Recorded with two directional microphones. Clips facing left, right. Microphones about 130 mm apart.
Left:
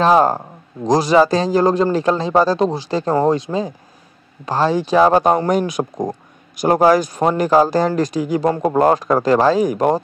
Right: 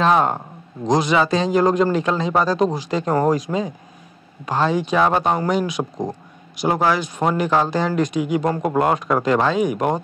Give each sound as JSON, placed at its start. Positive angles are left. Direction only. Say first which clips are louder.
{"t": 0.0, "sound": "speech", "louder": "left 4 dB", "side_deg": 35}